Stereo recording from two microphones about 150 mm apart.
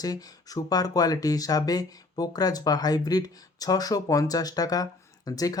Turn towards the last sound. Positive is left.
turn(degrees=25)  # may be behind; listen again after turning